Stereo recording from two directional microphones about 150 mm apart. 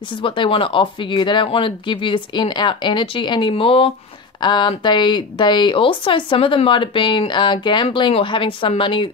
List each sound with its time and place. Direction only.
0.2 s speech: 35° left (ahead or behind)